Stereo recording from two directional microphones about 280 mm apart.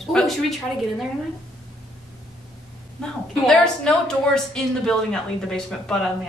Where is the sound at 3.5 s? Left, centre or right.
Centre.